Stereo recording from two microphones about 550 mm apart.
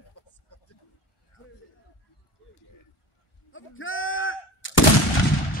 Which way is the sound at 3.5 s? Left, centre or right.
Left.